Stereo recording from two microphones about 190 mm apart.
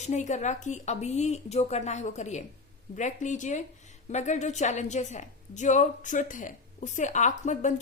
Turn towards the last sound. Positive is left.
turn(degrees=40)  # may be behind; listen again after turning